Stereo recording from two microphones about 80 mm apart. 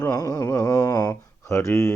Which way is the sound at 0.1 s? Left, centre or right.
Left.